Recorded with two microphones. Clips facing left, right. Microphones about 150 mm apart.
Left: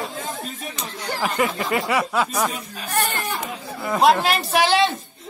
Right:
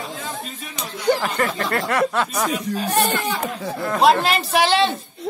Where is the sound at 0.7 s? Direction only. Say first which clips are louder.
Right 13 dB; 15° right (ahead or behind).